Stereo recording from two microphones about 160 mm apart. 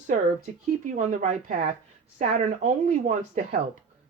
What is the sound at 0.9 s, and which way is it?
Speech, 50° right (ahead or behind).